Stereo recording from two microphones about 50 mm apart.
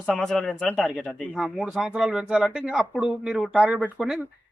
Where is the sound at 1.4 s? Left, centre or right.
Right.